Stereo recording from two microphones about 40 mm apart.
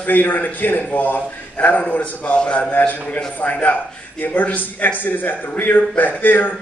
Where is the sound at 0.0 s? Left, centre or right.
Left.